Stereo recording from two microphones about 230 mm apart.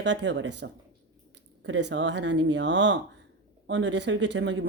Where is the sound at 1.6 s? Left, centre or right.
Right.